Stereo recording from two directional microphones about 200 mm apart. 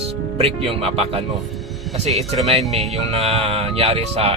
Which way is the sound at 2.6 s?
Centre (ahead or behind).